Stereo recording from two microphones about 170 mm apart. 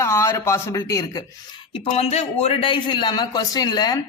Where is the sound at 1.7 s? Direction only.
35° left (ahead or behind).